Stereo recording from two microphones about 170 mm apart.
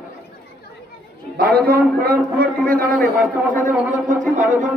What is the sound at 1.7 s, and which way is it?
A man's voice, 60° right (ahead or behind).